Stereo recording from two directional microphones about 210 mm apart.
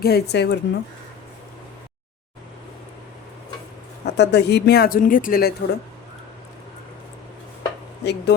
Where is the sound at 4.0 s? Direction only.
55° left (ahead or behind).